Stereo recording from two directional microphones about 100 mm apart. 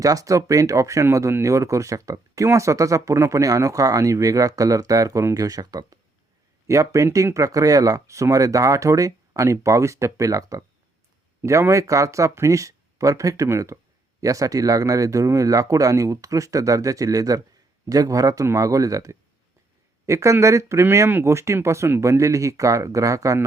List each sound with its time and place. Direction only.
0.0 s speech: 35° right (ahead or behind)